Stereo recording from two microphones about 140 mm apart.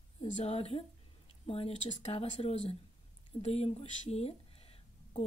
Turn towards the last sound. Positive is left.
turn(degrees=45)  # may be behind; listen again after turning